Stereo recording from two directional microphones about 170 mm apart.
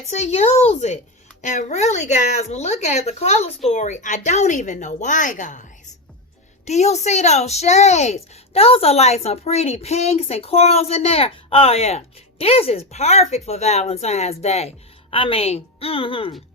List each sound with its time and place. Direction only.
0.1 s speech: 40° left (ahead or behind)
6.7 s speech: 40° left (ahead or behind)